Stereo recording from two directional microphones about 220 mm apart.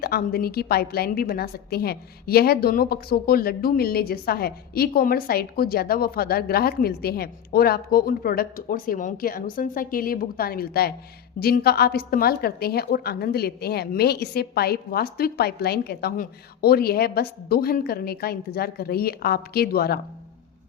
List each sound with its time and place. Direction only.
0.0 s a woman's voice: 45° left (ahead or behind)